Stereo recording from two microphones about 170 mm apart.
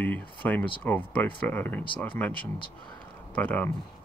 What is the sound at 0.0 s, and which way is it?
Speech, 10° left (ahead or behind).